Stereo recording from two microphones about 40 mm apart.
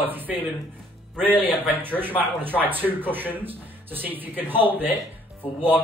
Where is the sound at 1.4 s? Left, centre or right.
Right.